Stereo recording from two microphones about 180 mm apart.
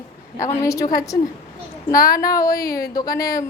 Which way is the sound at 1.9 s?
55° left (ahead or behind).